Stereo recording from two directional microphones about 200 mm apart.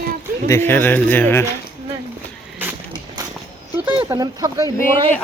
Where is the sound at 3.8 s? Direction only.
5° right (ahead or behind).